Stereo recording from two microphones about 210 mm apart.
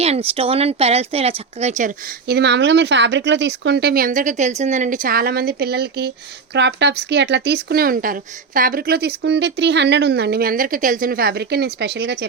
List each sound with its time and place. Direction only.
0.0 s speech: 30° right (ahead or behind)
2.2 s speech: 50° right (ahead or behind)